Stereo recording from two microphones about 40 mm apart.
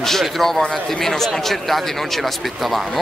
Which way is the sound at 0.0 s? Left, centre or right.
Centre.